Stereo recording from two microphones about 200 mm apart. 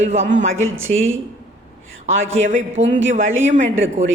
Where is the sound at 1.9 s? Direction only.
75° right (ahead or behind).